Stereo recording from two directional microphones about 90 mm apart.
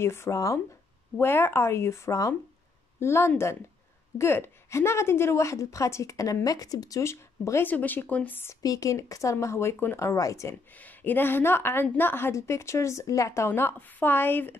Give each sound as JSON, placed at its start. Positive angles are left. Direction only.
{"t": 0.0, "sound": "a woman's voice", "side_deg": 30}
{"t": 7.7, "sound": "a woman's voice", "side_deg": 20}
{"t": 8.6, "sound": "a woman's voice", "side_deg": 40}
{"t": 10.7, "sound": "a woman's voice", "side_deg": 20}